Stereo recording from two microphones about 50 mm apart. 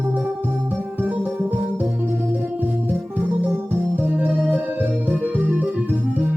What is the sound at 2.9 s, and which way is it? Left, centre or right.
Organ, right.